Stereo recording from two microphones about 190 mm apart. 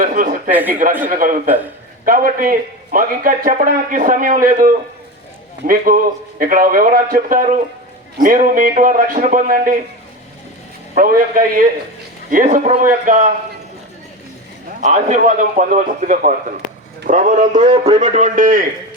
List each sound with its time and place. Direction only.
0.0 s a man's voice: 45° right (ahead or behind)
1.5 s a man's voice: 10° right (ahead or behind)
2.0 s a man's voice: 50° right (ahead or behind)
10.9 s a man's voice: 45° right (ahead or behind)
14.8 s a man's voice: 40° right (ahead or behind)